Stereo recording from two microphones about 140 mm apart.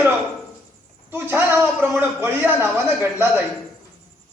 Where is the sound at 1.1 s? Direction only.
15° right (ahead or behind).